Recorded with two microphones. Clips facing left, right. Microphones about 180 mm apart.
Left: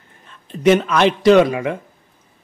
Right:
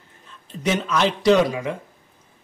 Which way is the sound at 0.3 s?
60° left (ahead or behind).